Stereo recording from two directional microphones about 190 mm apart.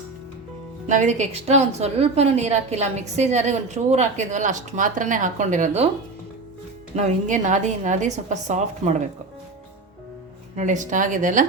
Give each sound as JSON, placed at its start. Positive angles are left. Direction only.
{"t": 0.9, "sound": "a woman's voice", "side_deg": -40}
{"t": 6.9, "sound": "a woman's voice", "side_deg": -40}
{"t": 10.5, "sound": "speech", "side_deg": -40}